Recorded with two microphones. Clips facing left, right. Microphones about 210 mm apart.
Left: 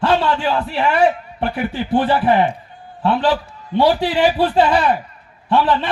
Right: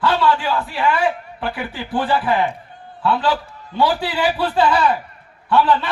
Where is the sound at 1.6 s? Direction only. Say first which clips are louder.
Left 7 dB; 20° left (ahead or behind).